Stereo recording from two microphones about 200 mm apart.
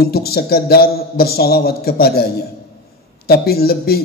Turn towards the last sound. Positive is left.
turn(degrees=50)  # may be behind; listen again after turning